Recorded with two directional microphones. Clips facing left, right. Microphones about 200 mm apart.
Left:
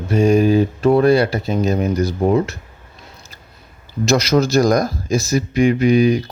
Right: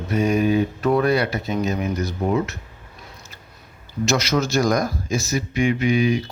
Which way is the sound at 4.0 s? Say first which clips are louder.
Left 5 dB; 35° left (ahead or behind).